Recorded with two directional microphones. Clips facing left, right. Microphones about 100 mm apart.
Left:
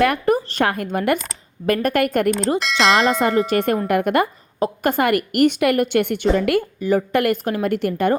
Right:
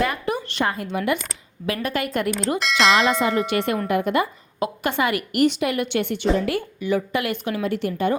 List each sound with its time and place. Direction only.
0.3 s a sound: 40° left (ahead or behind)
0.6 s a woman's voice: 65° left (ahead or behind)
0.9 s a woman's voice: 50° left (ahead or behind)
2.6 s bell: centre (ahead or behind)
3.1 s a woman's voice: 45° left (ahead or behind)
3.8 s a woman's voice: 55° left (ahead or behind)
4.6 s a woman's voice: 45° left (ahead or behind); by 6.6 s 65° left (ahead or behind)
6.6 s a woman's voice: 40° left (ahead or behind)